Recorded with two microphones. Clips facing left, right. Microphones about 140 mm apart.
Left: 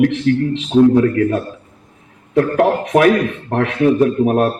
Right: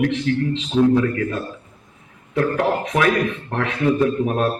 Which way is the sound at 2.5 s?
55° left (ahead or behind).